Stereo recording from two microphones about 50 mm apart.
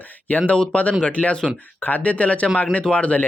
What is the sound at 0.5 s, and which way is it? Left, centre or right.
Speech, centre.